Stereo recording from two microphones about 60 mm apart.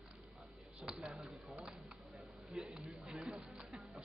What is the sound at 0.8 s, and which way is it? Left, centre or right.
Speech, centre.